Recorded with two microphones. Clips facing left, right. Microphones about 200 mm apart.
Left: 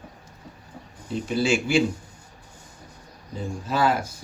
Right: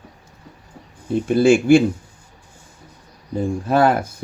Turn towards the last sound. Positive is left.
turn(degrees=-55)  # may be behind; listen again after turning